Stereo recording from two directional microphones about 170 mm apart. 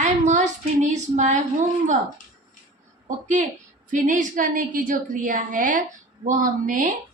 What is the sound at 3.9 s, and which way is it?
A woman's voice, 50° right (ahead or behind).